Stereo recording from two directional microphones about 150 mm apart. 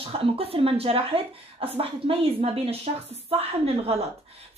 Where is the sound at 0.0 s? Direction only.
40° right (ahead or behind).